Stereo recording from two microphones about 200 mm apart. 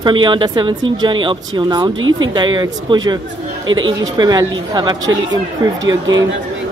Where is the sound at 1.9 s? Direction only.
80° right.